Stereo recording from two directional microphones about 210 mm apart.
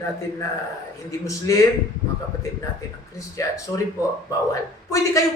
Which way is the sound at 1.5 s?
15° left (ahead or behind).